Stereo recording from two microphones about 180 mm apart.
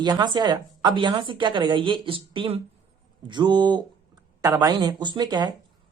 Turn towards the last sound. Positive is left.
turn(degrees=-25)  # may be behind; listen again after turning